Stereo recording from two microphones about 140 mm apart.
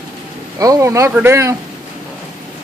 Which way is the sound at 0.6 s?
25° right (ahead or behind).